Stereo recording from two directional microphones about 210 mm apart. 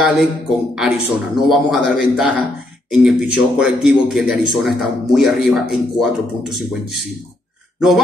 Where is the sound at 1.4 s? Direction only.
5° right (ahead or behind).